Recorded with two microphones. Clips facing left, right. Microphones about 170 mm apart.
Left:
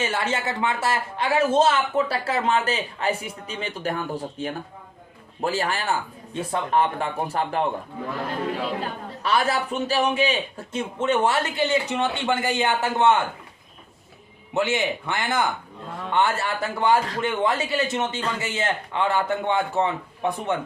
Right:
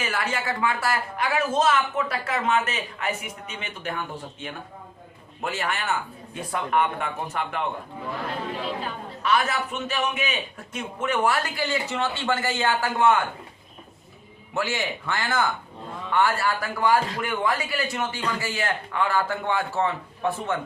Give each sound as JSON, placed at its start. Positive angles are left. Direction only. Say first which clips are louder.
{"t": 0.0, "sound": "speech", "louder": "left 3 dB", "side_deg": 25}
{"t": 8.8, "sound": "a man's voice", "louder": "left 1 dB", "side_deg": 35}
{"t": 14.5, "sound": "a man's voice", "louder": "left 4 dB", "side_deg": 20}